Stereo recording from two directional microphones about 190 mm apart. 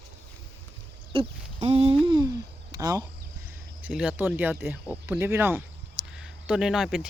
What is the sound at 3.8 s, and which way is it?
Speech, 5° right (ahead or behind).